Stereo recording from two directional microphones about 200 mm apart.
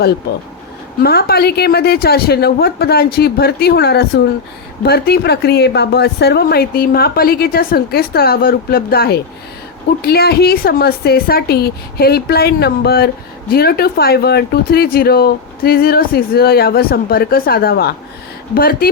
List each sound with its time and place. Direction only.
1.0 s a woman's voice: 50° left (ahead or behind)